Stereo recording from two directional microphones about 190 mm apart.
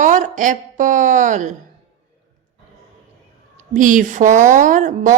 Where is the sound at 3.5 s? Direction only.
45° right (ahead or behind).